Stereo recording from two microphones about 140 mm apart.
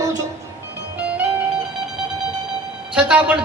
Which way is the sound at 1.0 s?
10° right (ahead or behind).